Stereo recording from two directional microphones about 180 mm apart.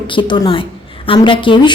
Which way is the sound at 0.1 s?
25° left (ahead or behind).